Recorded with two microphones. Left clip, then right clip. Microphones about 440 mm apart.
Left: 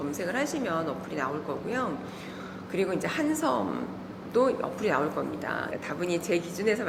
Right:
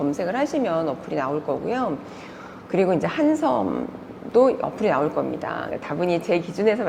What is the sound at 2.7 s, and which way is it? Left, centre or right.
A woman's voice, right.